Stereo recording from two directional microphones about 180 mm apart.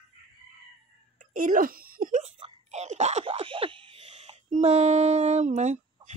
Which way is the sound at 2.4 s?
35° right (ahead or behind).